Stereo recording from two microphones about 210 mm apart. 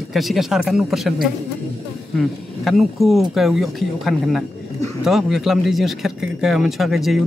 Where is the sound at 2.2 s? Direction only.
Centre (ahead or behind).